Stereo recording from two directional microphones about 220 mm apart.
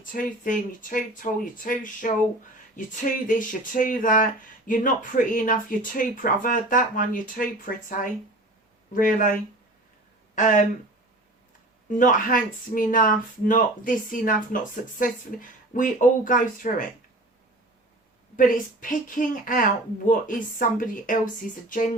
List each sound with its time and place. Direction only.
0.0 s speech: 40° left (ahead or behind)
3.2 s speech: 35° left (ahead or behind)
10.3 s speech: 35° left (ahead or behind)
11.9 s speech: 35° left (ahead or behind)
18.3 s speech: 35° left (ahead or behind)